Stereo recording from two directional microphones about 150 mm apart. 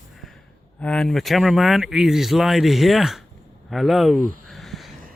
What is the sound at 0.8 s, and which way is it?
Speech, 5° left (ahead or behind).